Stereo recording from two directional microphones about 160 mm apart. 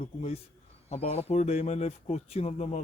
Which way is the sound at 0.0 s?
40° left (ahead or behind).